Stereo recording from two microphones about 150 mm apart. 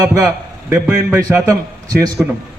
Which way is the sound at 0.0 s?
20° right (ahead or behind).